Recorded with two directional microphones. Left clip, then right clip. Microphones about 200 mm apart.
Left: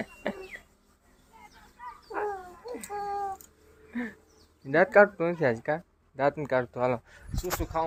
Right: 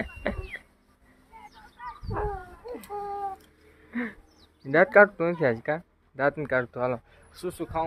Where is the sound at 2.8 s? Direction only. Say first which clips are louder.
Left 1 dB; centre (ahead or behind).